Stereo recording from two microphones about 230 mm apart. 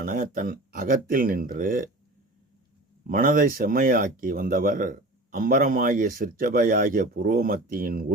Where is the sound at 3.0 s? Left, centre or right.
Right.